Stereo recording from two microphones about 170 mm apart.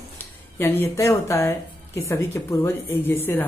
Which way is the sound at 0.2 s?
15° left (ahead or behind).